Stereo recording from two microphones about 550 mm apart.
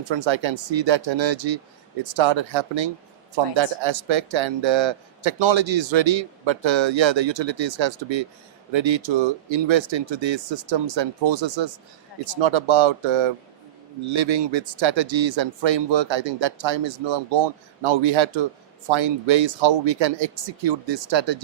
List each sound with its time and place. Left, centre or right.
0.1 s speech: right